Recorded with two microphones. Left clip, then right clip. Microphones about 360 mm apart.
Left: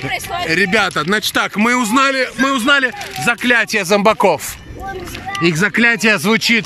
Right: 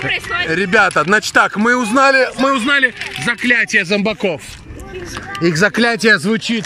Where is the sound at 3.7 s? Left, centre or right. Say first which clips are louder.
Left 2 dB; centre.